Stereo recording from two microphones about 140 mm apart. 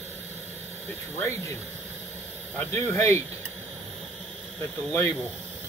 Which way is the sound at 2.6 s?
15° left (ahead or behind).